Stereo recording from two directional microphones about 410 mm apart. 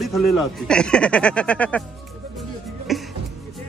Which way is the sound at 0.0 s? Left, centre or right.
Centre.